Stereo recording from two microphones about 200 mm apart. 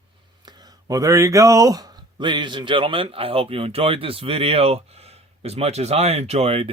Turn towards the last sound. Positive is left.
turn(degrees=-30)  # may be behind; listen again after turning